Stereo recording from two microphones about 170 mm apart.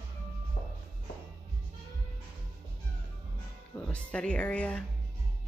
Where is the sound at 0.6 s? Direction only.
40° left (ahead or behind).